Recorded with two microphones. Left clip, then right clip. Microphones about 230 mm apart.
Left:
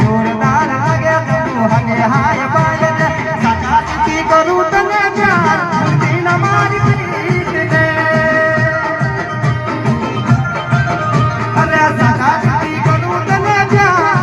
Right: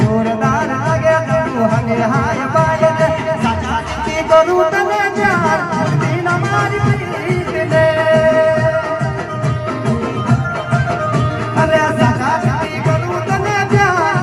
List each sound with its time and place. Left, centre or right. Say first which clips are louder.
0.0 s music: left 1 dB; left
11.5 s music: left 1 dB; left
13.3 s music: left 4 dB; left